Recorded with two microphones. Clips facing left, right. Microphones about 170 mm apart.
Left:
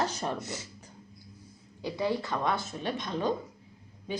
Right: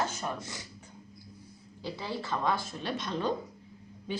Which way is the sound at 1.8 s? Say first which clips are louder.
Left 6 dB; 20° left (ahead or behind).